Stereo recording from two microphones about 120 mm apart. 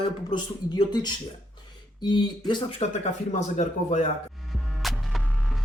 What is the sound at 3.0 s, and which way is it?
A man's voice, 65° left (ahead or behind).